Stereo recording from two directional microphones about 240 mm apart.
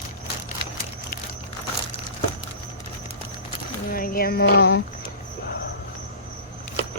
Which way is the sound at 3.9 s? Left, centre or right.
Left.